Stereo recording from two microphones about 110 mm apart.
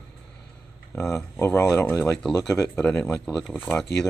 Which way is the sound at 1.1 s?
25° left (ahead or behind).